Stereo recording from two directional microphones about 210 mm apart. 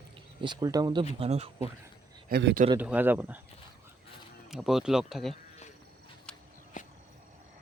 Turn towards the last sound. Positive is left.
turn(degrees=40)  # may be behind; listen again after turning